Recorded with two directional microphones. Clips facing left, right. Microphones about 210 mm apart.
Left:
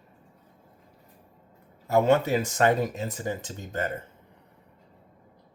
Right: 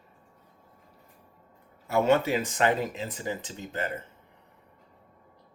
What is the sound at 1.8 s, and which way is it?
Speech, 40° left (ahead or behind).